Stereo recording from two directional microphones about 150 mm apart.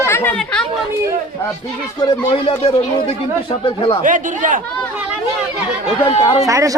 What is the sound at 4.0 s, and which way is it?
Speech, 60° right (ahead or behind).